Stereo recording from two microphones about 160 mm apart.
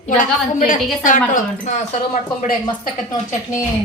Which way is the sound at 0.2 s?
55° left (ahead or behind).